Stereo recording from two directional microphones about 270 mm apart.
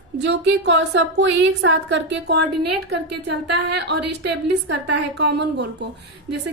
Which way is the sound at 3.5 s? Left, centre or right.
Right.